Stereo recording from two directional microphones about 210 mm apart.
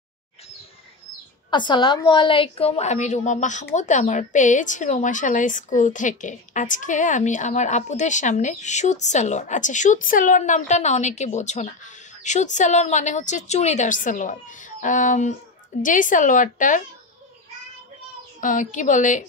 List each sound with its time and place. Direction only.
1.5 s a woman's voice: 20° left (ahead or behind); by 16.8 s 40° left (ahead or behind)
18.4 s speech: 35° left (ahead or behind)